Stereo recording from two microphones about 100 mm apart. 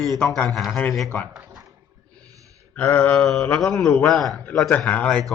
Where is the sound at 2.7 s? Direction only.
15° left (ahead or behind).